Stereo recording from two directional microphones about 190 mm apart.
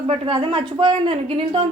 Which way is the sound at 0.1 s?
35° right (ahead or behind).